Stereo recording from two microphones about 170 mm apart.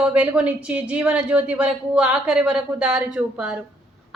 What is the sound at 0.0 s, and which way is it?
A woman's voice, 10° right (ahead or behind).